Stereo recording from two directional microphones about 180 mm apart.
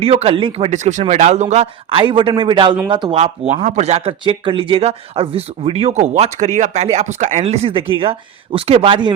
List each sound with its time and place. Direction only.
0.0 s speech: 35° right (ahead or behind)
1.9 s a man's voice: 30° right (ahead or behind)